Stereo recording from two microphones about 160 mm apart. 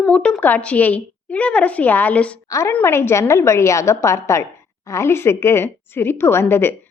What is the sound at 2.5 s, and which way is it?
A woman's voice, 20° left (ahead or behind).